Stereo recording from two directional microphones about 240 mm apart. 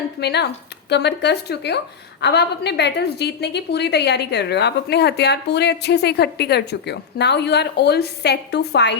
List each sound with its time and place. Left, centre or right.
0.2 s a woman's voice: left